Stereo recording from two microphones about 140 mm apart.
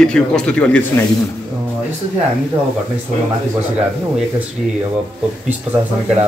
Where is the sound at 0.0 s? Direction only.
5° left (ahead or behind).